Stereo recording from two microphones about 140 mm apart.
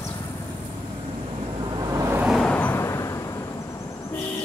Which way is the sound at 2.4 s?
10° left (ahead or behind).